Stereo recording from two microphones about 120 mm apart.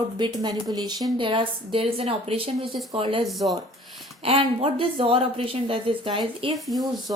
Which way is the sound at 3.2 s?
Centre (ahead or behind).